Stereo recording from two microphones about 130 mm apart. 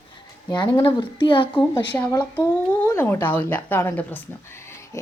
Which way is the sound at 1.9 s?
20° left (ahead or behind).